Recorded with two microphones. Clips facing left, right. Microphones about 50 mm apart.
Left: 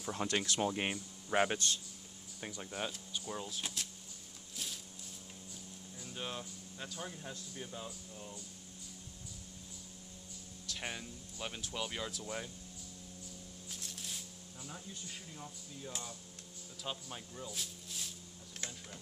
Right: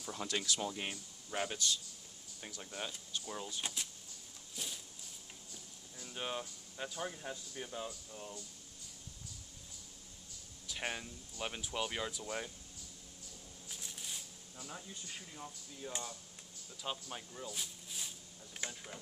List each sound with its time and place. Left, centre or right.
0.1 s speech: left
2.4 s speech: centre
4.6 s a sound: centre
6.1 s speech: centre
10.7 s speech: centre
13.7 s speech: centre
18.6 s a sound: centre